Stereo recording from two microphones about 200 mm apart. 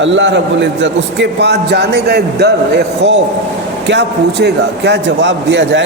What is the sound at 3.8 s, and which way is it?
A man's voice, 60° right (ahead or behind).